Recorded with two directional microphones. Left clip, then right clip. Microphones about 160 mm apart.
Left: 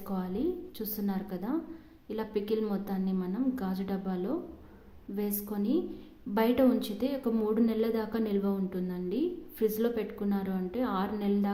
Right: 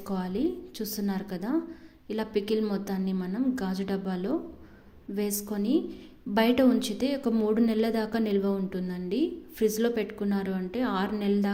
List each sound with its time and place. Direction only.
0.1 s a woman's voice: 10° right (ahead or behind)